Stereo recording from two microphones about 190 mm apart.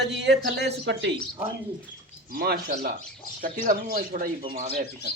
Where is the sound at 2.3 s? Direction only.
55° right (ahead or behind); by 4.7 s 35° right (ahead or behind).